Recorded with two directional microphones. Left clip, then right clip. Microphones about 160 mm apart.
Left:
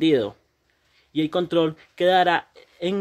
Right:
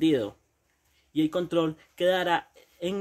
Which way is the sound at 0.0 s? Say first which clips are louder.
Left 5 dB; 30° left (ahead or behind).